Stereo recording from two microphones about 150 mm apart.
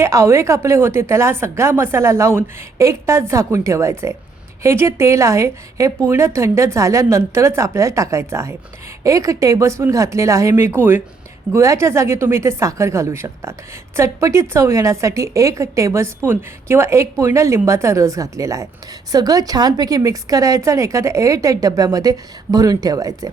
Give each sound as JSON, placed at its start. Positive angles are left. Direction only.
{"t": 0.0, "sound": "a woman's voice", "side_deg": -20}